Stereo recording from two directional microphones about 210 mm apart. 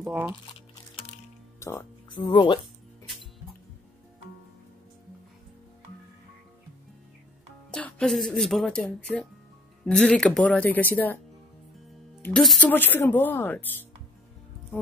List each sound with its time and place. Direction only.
0.0 s speech: 5° right (ahead or behind)
1.6 s speech: 10° left (ahead or behind)
7.7 s speech: 5° left (ahead or behind)
12.2 s speech: 5° left (ahead or behind)